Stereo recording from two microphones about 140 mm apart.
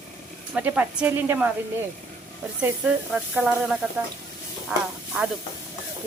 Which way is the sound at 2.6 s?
10° right (ahead or behind).